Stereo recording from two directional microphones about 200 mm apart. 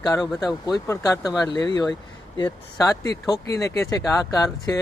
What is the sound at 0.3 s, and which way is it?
Speech, 20° left (ahead or behind).